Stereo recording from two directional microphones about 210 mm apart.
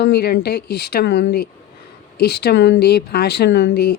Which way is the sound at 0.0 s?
50° left (ahead or behind).